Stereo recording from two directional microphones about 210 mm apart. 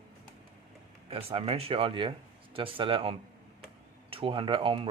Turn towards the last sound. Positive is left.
turn(degrees=-25)  # may be behind; listen again after turning